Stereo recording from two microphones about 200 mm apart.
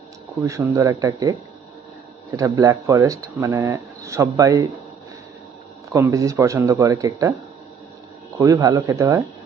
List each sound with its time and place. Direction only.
0.4 s speech: 15° right (ahead or behind)
2.3 s speech: 15° right (ahead or behind)
5.9 s speech: 15° right (ahead or behind)
8.4 s speech: 15° right (ahead or behind)